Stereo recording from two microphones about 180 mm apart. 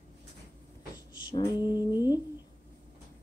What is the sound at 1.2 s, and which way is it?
Speech, 25° left (ahead or behind).